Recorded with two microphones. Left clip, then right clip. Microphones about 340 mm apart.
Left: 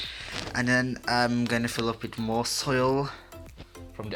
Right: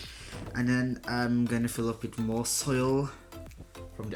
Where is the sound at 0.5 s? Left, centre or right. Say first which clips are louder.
Left 5 dB; centre.